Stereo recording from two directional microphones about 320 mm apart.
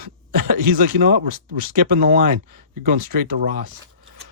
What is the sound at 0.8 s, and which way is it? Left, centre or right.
Speech, right.